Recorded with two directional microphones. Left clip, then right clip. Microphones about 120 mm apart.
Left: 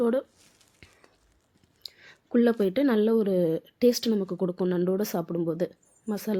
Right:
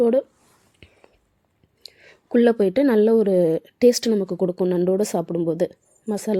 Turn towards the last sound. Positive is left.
turn(degrees=-35)  # may be behind; listen again after turning